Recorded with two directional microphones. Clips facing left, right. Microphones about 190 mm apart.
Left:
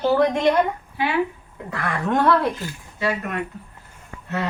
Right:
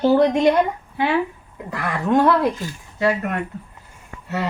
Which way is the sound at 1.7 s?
10° right (ahead or behind).